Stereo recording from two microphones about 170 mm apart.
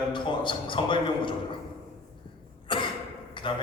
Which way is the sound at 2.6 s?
30° left (ahead or behind).